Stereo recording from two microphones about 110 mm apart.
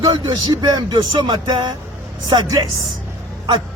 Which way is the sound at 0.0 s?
40° right (ahead or behind).